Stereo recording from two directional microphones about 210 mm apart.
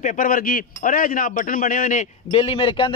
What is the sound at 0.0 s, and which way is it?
A man's voice, 40° left (ahead or behind).